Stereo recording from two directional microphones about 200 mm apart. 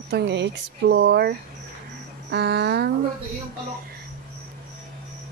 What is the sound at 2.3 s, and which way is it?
Speech, 55° right (ahead or behind).